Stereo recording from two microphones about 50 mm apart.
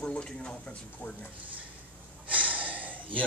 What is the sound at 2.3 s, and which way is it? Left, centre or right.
Gasp, right.